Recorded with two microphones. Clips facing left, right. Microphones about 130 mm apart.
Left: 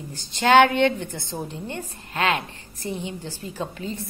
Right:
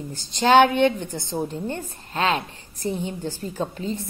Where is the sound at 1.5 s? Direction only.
35° right (ahead or behind).